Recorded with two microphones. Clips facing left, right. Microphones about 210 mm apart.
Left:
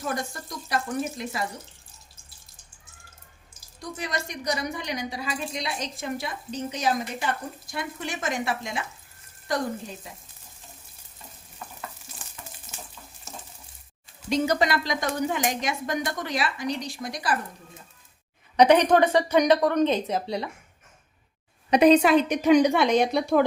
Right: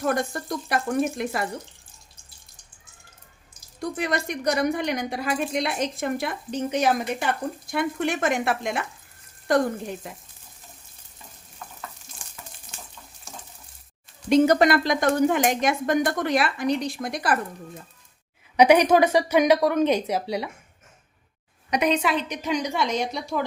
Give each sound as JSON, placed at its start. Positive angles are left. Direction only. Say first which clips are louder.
{"t": 0.0, "sound": "a woman's voice", "louder": "right 6 dB", "side_deg": -60}
{"t": 3.8, "sound": "a woman's voice", "louder": "right 6 dB", "side_deg": -60}
{"t": 10.0, "sound": "a woman's voice", "louder": "right 5 dB", "side_deg": -55}
{"t": 11.6, "sound": "frying", "louder": "left 1 dB", "side_deg": 5}
{"t": 14.3, "sound": "a woman's voice", "louder": "right 6 dB", "side_deg": -55}
{"t": 18.5, "sound": "speech", "louder": "right 1 dB", "side_deg": -10}
{"t": 21.7, "sound": "a woman's voice", "louder": "left 6 dB", "side_deg": 30}